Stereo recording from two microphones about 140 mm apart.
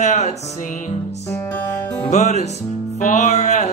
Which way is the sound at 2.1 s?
55° left (ahead or behind).